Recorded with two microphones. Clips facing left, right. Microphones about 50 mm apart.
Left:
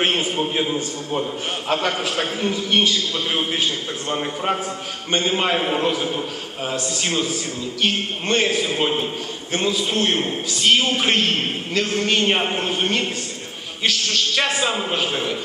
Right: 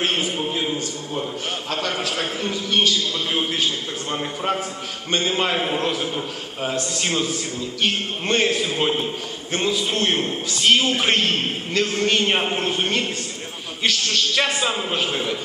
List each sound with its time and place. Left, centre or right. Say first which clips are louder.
0.0 s a sound: left 2 dB; left
1.7 s a man's voice: left 4 dB; left
4.5 s a man's voice: left 1 dB; left
5.1 s a man's voice: left 1 dB; centre